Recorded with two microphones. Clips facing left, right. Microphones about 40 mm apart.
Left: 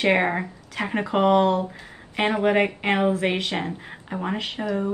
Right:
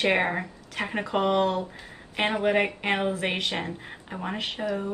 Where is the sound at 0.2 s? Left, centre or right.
Centre.